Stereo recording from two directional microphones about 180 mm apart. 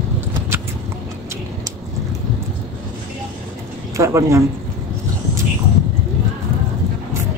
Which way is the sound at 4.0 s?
15° right (ahead or behind).